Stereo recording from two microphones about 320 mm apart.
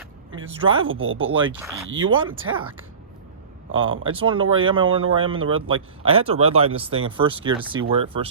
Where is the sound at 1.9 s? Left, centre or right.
Right.